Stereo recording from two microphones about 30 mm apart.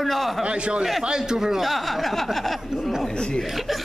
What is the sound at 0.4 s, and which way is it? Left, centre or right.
Speech, right.